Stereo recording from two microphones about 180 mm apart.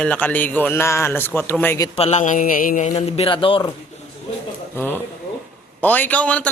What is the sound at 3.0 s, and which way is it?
Speech, 30° left (ahead or behind).